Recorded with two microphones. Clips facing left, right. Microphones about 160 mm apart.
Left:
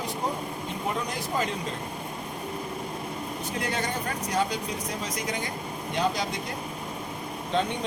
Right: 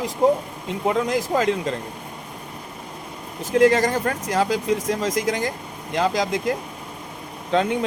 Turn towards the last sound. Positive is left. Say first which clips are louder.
# right 6 dB
turn(degrees=-90)